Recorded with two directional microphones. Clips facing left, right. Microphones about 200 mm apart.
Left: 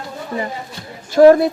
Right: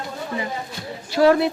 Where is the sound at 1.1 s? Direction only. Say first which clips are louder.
Left 7 dB; 45° left (ahead or behind).